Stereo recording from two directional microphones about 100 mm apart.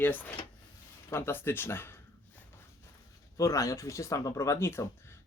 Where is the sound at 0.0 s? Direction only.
15° left (ahead or behind).